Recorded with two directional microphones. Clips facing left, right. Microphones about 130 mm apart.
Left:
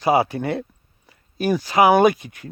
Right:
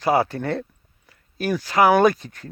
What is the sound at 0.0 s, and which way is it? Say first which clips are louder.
Speech: left 2 dB; 10° left (ahead or behind).